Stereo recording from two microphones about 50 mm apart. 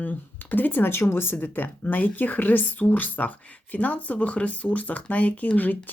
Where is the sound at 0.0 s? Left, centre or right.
Left.